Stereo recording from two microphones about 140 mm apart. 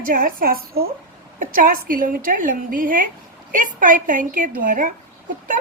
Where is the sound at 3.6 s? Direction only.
70° right (ahead or behind).